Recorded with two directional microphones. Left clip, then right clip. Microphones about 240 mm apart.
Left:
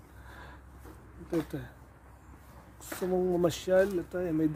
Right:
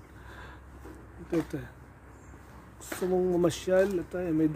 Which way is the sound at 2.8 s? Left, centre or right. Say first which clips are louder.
Right 2 dB; centre.